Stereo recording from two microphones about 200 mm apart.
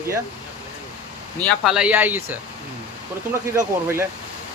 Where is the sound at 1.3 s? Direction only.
Centre (ahead or behind).